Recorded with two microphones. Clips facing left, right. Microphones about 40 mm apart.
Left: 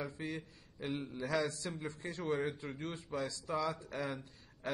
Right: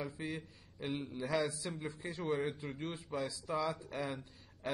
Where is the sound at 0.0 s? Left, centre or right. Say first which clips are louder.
Even; centre.